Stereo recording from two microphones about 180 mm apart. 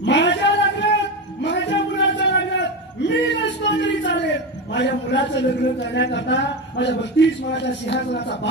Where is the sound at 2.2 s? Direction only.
75° left (ahead or behind).